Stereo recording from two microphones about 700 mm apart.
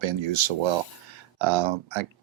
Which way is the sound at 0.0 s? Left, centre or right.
Right.